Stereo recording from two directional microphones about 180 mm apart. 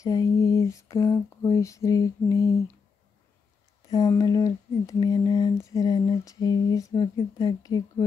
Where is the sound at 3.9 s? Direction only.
20° left (ahead or behind).